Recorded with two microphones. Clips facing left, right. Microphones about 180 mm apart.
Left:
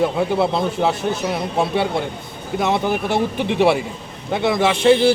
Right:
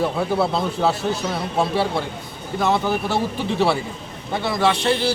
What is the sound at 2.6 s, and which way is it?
A man's voice, 20° left (ahead or behind).